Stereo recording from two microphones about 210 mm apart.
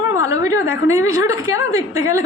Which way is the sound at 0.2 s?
15° right (ahead or behind).